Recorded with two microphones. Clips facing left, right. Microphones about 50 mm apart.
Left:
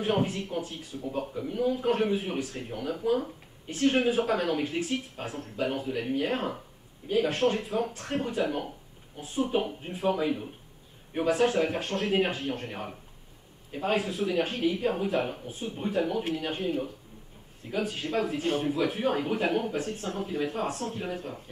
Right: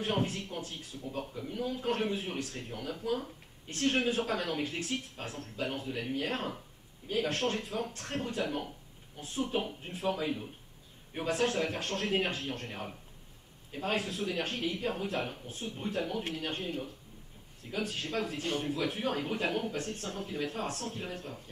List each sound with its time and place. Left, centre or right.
0.0 s speech: centre
3.6 s a man's voice: centre
9.6 s a man's voice: centre